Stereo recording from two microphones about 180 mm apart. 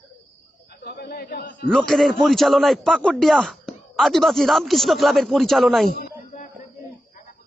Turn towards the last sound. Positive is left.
turn(degrees=0)  # may be behind; listen again after turning